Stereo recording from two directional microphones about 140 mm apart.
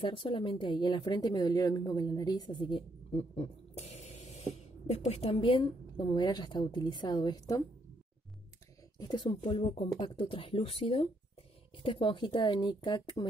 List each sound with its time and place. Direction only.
0.0 s speech: 40° left (ahead or behind)
3.1 s a sound: 50° left (ahead or behind)
4.9 s speech: 45° left (ahead or behind); by 7.6 s 25° left (ahead or behind)
9.0 s speech: 30° left (ahead or behind)